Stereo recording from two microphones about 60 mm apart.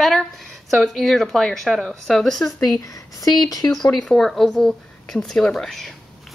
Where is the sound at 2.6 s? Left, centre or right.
Left.